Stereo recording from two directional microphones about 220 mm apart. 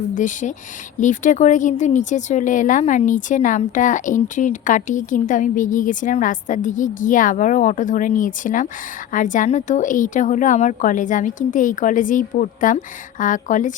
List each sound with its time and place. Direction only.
0.1 s speech: 35° left (ahead or behind)